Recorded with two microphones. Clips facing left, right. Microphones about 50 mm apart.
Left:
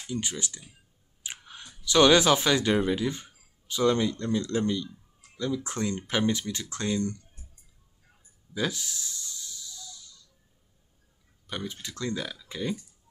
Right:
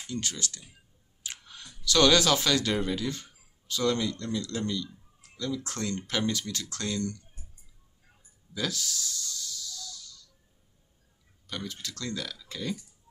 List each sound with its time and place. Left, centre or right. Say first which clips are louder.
0.0 s speech: left 2 dB; centre
8.5 s music: left 2 dB; left
11.4 s speech: left 2 dB; centre